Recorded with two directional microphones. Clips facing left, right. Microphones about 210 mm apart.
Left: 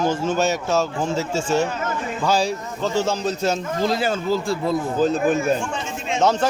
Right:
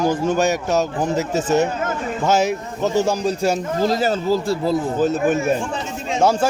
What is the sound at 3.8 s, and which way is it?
Speech, 40° right (ahead or behind).